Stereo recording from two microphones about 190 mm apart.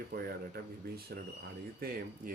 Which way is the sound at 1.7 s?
50° right (ahead or behind).